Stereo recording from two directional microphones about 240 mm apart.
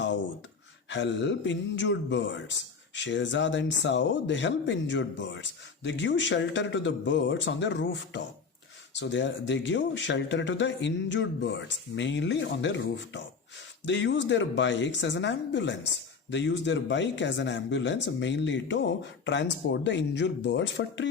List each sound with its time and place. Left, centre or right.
0.9 s speech: left